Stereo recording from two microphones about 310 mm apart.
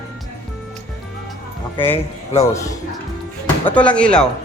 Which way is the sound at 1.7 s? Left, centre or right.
Centre.